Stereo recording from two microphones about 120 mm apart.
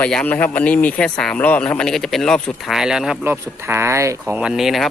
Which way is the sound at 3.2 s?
20° right (ahead or behind).